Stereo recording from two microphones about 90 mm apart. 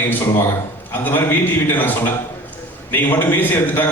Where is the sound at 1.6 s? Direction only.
20° left (ahead or behind).